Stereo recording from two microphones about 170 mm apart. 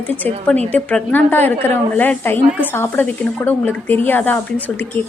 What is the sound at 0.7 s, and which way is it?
A woman's voice, 10° left (ahead or behind).